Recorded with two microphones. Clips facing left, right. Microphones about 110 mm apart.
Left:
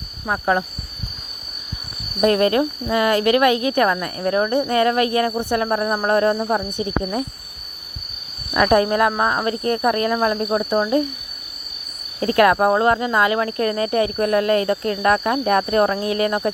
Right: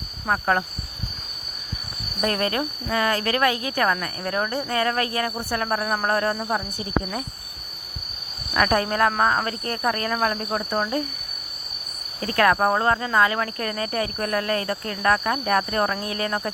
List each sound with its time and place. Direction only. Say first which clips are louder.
0.3 s speech: left 2 dB; 10° left (ahead or behind)
2.2 s speech: left 8 dB; 25° left (ahead or behind)
8.5 s speech: left 5 dB; 20° left (ahead or behind)
9.5 s speech: left 6 dB; 25° left (ahead or behind)
12.2 s speech: left 4 dB; 25° left (ahead or behind)